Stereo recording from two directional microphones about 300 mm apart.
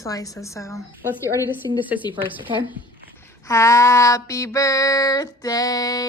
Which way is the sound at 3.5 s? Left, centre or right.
Centre.